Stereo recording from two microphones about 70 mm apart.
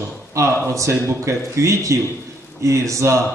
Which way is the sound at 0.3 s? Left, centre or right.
Right.